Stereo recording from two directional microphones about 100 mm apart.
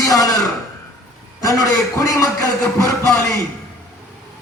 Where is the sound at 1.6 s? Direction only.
30° left (ahead or behind).